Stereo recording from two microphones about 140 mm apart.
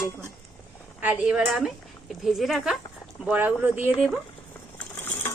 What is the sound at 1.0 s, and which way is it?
Speech, 10° right (ahead or behind).